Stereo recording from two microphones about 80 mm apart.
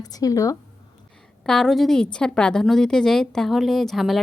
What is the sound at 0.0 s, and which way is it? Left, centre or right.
Speech, left.